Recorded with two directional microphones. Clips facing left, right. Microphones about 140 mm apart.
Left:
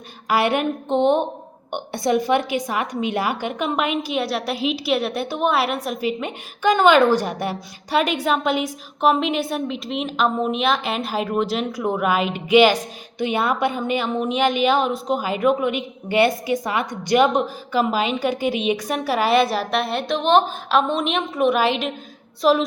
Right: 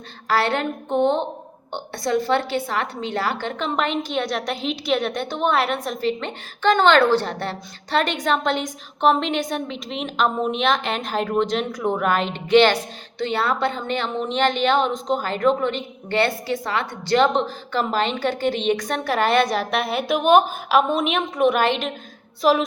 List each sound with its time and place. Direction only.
0.3 s a woman's voice: 15° left (ahead or behind); by 22.6 s centre (ahead or behind)